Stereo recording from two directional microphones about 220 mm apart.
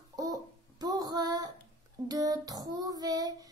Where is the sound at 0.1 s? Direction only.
15° right (ahead or behind).